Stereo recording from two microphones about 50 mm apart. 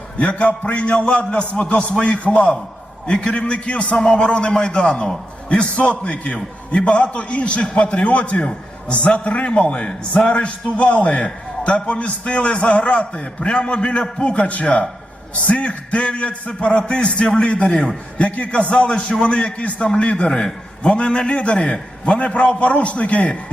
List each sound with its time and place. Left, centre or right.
0.2 s a man's voice: left